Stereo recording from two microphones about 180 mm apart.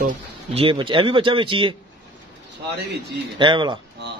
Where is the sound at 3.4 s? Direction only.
25° right (ahead or behind).